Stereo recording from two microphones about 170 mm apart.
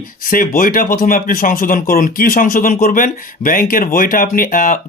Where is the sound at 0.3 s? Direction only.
55° left (ahead or behind).